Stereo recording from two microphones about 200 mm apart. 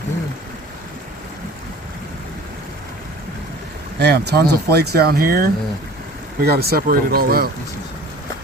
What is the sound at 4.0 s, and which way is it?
Speech, 55° right (ahead or behind).